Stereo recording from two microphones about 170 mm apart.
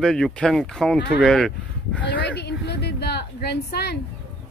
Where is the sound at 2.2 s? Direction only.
80° left.